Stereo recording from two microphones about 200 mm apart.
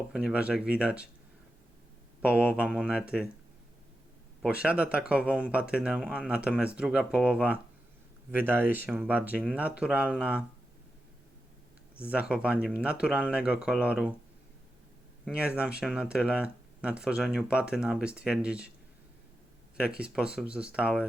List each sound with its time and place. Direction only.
0.1 s speech: 5° right (ahead or behind)
2.2 s speech: 5° right (ahead or behind)
4.4 s speech: 5° right (ahead or behind)
12.0 s speech: 5° right (ahead or behind)
15.2 s speech: 5° right (ahead or behind)
19.7 s speech: 5° right (ahead or behind)